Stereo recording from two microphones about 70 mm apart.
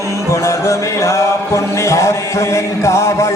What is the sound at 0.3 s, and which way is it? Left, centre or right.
Music, left.